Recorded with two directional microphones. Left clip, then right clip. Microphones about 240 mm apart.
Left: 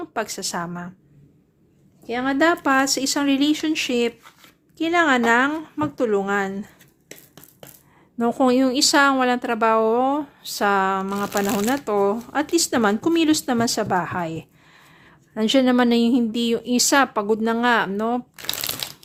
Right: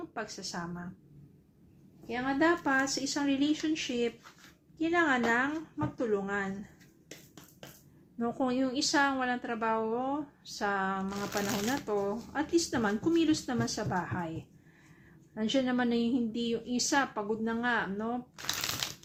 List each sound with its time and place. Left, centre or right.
0.0 s a woman's voice: left
2.0 s a woman's voice: left
8.2 s a woman's voice: left
15.4 s a woman's voice: left